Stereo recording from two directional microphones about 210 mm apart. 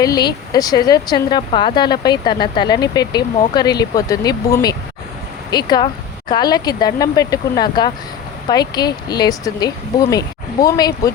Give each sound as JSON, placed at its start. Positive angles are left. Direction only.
{"t": 0.0, "sound": "speech", "side_deg": 20}